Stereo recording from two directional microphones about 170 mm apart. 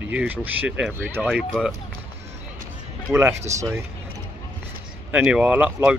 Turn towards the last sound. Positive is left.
turn(degrees=-10)  # may be behind; listen again after turning